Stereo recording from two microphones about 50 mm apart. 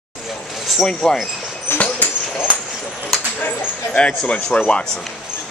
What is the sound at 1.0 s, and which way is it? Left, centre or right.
Speech, centre.